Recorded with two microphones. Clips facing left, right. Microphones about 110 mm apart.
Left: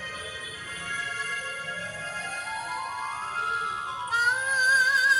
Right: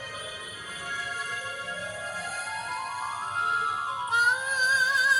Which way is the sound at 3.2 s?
25° right (ahead or behind).